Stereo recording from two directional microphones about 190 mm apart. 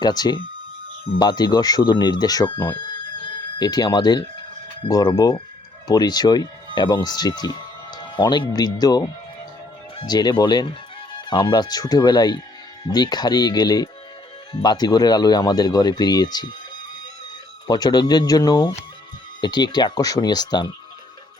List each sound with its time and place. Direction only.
0.0 s speech: 20° left (ahead or behind)
17.7 s speech: 20° left (ahead or behind)